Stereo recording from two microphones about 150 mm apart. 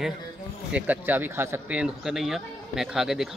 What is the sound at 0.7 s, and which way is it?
Speech, 10° right (ahead or behind).